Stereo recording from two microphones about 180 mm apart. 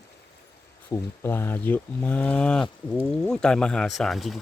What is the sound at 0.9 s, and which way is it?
Speech, 15° left (ahead or behind).